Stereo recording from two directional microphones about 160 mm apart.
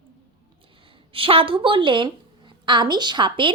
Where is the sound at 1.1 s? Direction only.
35° right (ahead or behind).